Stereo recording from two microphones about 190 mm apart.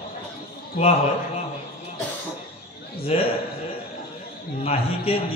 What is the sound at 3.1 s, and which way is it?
Speech, 35° left (ahead or behind).